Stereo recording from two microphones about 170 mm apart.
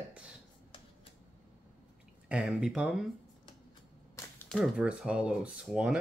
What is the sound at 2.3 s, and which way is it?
Speech, 5° right (ahead or behind).